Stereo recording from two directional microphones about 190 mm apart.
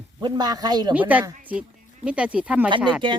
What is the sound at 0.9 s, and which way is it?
Speech, 10° right (ahead or behind).